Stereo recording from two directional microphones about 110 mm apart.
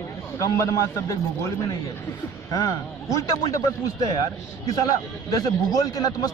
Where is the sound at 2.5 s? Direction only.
30° left (ahead or behind).